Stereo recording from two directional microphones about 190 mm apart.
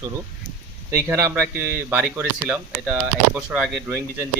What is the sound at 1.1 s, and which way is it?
Speech, 10° right (ahead or behind).